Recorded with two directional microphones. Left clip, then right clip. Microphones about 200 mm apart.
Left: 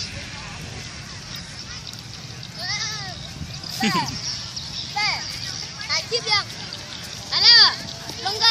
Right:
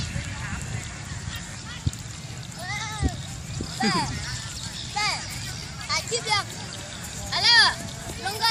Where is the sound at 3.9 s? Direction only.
50° right (ahead or behind).